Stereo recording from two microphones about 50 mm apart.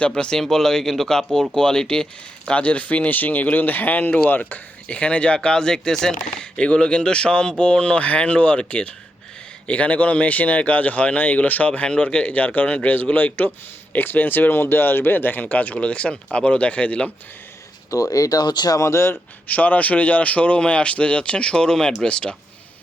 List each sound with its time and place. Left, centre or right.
0.0 s speech: centre
2.5 s speech: left
11.9 s speech: centre
18.8 s speech: left
19.5 s speech: left